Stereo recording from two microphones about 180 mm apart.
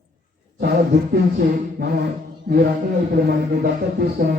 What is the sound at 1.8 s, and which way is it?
Speech, 60° right (ahead or behind).